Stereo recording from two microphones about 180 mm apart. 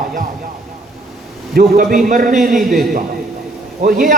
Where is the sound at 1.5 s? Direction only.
50° right (ahead or behind).